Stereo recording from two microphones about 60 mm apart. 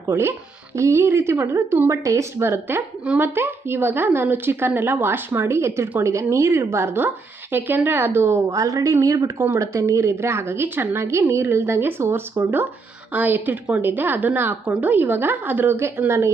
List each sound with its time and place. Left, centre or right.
0.1 s a woman's voice: right
8.4 s a woman's voice: right
13.1 s speech: right